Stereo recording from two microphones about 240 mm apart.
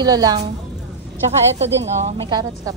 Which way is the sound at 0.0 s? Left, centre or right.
Centre.